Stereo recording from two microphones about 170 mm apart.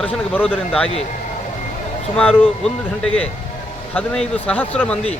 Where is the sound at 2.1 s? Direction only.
5° left (ahead or behind).